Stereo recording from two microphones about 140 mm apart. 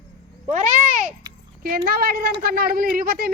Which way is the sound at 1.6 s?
90° right.